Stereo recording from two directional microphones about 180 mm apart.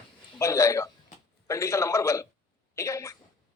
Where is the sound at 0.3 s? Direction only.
15° left (ahead or behind).